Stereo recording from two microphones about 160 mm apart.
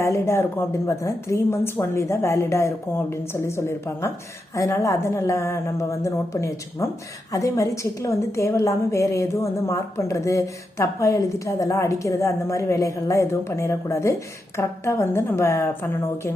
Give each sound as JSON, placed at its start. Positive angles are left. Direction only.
{"t": 0.0, "sound": "a woman's voice", "side_deg": 15}